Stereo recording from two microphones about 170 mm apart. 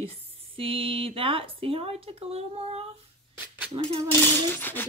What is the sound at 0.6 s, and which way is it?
Speech, 30° right (ahead or behind).